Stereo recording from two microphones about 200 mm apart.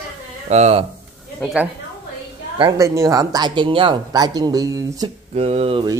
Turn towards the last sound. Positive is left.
turn(degrees=-25)  # may be behind; listen again after turning